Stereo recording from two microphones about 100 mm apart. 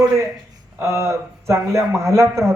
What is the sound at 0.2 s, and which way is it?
Speech, 30° right (ahead or behind).